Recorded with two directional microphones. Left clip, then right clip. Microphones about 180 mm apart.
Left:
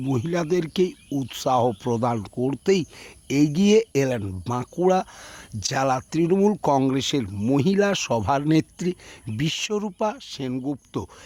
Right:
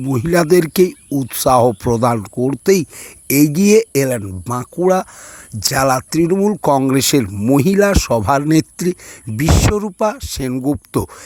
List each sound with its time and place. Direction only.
0.0 s speech: 15° right (ahead or behind)
0.3 s speech: 35° right (ahead or behind); by 6.7 s 15° right (ahead or behind)
6.9 s speech: 35° right (ahead or behind)
7.3 s speech: 15° right (ahead or behind); by 11.1 s 35° right (ahead or behind)